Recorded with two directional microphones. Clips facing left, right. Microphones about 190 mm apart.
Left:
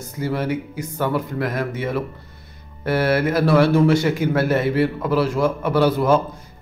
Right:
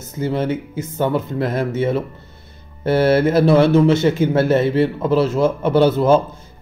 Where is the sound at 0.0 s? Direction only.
25° right (ahead or behind).